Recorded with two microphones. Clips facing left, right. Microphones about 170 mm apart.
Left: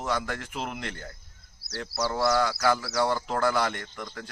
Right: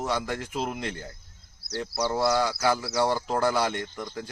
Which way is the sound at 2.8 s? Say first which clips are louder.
Right 1 dB; 20° right (ahead or behind).